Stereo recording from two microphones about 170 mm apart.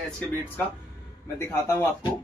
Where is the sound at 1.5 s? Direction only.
15° left (ahead or behind).